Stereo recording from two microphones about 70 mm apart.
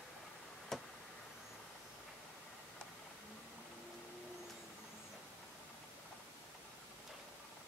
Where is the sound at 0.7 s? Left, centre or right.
Centre.